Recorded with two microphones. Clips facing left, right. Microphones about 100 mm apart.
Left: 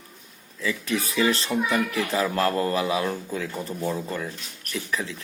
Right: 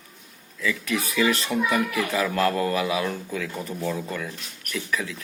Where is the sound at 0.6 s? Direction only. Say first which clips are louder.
Even; 30° left (ahead or behind).